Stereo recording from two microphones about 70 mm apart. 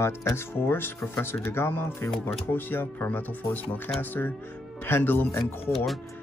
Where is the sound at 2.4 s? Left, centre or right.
Left.